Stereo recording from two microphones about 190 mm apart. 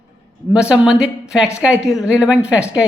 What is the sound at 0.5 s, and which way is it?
Speech, 5° right (ahead or behind).